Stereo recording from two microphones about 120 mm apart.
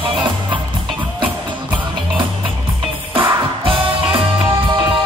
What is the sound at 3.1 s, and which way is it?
Music, 50° right (ahead or behind).